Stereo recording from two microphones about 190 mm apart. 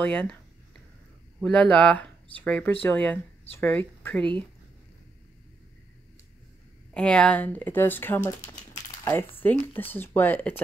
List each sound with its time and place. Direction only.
0.0 s speech: 5° left (ahead or behind)
1.4 s speech: 5° left (ahead or behind)
4.2 s speech: 25° right (ahead or behind)
6.9 s speech: 5° left (ahead or behind)
9.4 s speech: 10° left (ahead or behind)